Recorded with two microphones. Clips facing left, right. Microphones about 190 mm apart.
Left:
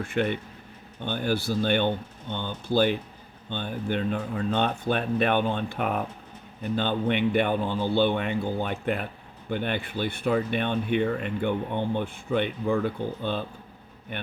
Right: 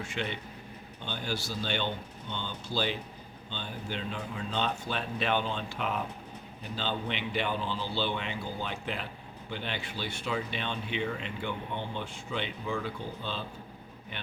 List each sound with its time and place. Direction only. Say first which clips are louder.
0.0 s a man's voice: left 9 dB; 55° left (ahead or behind)